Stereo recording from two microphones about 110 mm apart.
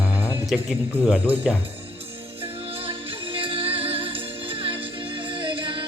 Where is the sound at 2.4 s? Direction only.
55° right (ahead or behind).